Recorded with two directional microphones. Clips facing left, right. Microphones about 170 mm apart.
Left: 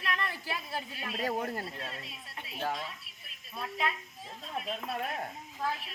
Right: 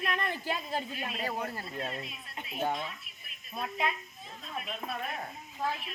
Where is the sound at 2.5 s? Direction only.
15° right (ahead or behind).